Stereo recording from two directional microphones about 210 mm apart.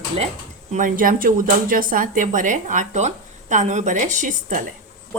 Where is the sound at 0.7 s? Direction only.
40° right (ahead or behind).